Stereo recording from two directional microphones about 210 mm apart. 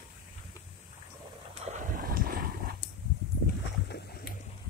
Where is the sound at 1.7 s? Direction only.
35° right (ahead or behind).